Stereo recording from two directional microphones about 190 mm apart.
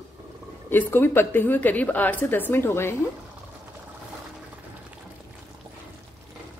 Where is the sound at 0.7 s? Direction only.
10° left (ahead or behind).